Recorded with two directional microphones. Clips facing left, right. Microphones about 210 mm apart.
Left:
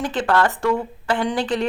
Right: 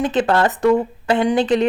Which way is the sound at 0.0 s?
20° right (ahead or behind).